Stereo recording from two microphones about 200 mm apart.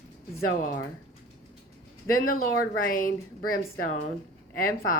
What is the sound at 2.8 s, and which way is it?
Speech, 45° left (ahead or behind).